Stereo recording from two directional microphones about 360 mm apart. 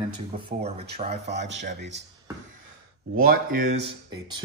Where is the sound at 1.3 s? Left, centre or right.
Right.